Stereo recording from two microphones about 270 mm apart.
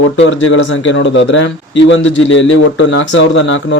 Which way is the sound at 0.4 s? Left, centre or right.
Left.